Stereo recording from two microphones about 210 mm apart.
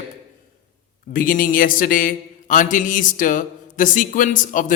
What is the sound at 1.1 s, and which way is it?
Mantra, 40° left (ahead or behind).